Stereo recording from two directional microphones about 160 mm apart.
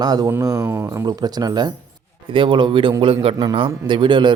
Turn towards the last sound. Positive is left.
turn(degrees=-30)  # may be behind; listen again after turning